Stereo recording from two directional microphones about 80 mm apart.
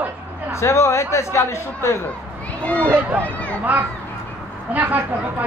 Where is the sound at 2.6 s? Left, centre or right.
Centre.